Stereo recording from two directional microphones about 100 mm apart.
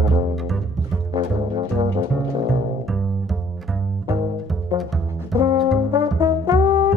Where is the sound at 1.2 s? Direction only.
45° right (ahead or behind).